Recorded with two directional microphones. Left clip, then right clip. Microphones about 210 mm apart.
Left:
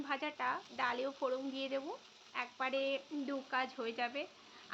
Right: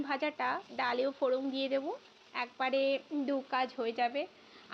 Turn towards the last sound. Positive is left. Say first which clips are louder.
# right 6 dB
turn(degrees=-15)  # may be behind; listen again after turning